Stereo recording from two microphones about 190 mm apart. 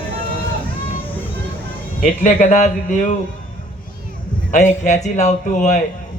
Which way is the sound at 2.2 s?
35° left (ahead or behind).